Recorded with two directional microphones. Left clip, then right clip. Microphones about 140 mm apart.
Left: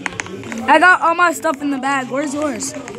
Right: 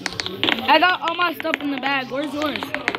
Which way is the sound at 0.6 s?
15° left (ahead or behind).